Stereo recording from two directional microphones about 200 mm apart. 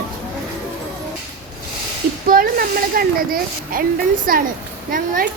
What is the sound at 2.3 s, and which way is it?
A woman's voice, 45° right (ahead or behind).